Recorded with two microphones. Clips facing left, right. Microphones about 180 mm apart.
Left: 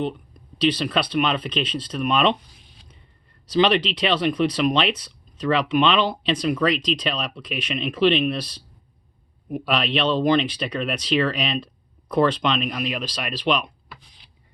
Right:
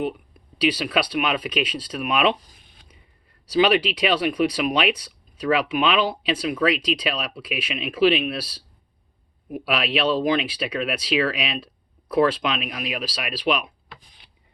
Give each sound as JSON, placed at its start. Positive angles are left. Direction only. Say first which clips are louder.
{"t": 0.0, "sound": "speech", "louder": "even", "side_deg": -10}
{"t": 2.4, "sound": "a sound", "louder": "left 1 dB", "side_deg": -50}
{"t": 3.4, "sound": "speech", "louder": "even", "side_deg": -10}